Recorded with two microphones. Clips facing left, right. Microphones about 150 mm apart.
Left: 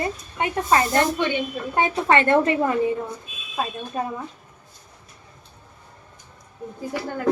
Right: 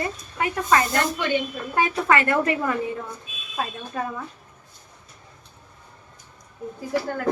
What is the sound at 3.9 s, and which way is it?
Speech, 25° left (ahead or behind).